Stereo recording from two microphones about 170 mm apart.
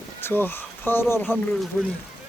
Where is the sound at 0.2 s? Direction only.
10° left (ahead or behind).